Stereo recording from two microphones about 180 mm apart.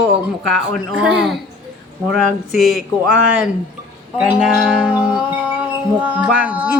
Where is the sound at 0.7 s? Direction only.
5° right (ahead or behind).